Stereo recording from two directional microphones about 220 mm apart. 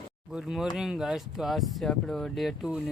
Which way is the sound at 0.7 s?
5° right (ahead or behind).